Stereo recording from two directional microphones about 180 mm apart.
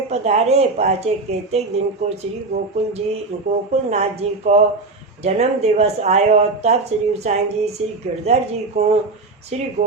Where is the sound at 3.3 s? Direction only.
35° right (ahead or behind).